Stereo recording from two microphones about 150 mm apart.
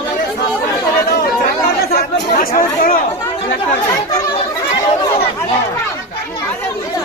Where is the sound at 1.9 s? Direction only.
80° left.